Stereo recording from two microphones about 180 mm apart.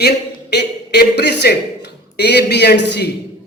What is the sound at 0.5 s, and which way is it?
A man's voice, 70° left (ahead or behind).